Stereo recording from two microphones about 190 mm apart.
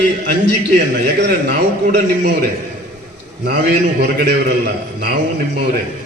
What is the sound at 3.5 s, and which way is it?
A man's voice, 60° right (ahead or behind).